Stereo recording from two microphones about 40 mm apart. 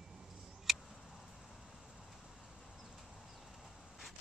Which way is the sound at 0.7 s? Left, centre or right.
Centre.